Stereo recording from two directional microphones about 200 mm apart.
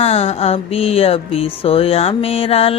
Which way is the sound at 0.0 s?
30° left (ahead or behind).